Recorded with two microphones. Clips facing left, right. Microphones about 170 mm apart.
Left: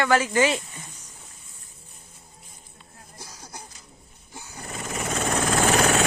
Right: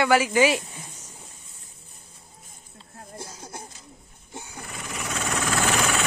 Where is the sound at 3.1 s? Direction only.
25° right (ahead or behind).